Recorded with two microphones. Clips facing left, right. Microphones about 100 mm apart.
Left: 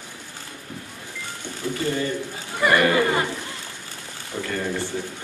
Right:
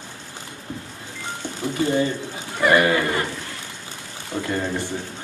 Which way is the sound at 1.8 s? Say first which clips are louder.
Right 5 dB; 20° right (ahead or behind).